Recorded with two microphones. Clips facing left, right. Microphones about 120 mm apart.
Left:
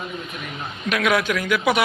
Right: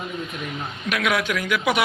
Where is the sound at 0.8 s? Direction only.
5° right (ahead or behind).